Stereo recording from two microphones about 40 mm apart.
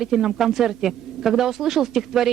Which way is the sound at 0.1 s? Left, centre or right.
Centre.